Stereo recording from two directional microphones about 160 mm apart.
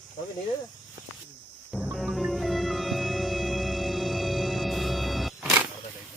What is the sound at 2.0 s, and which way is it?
Music, centre (ahead or behind).